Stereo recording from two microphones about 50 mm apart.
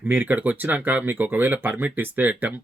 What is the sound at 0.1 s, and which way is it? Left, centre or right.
Speech, right.